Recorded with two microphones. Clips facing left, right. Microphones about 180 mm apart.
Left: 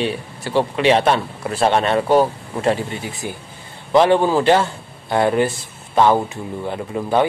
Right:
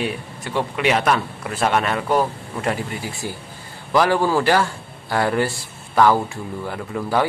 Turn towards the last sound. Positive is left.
turn(degrees=20)  # may be behind; listen again after turning